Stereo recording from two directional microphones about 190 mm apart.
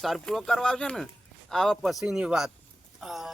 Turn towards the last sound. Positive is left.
turn(degrees=0)  # may be behind; listen again after turning